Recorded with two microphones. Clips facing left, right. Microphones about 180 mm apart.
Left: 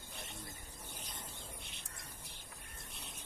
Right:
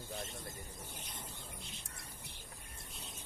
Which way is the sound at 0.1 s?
60° right (ahead or behind).